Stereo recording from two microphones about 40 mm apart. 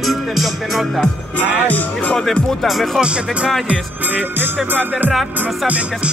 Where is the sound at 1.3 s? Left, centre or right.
Left.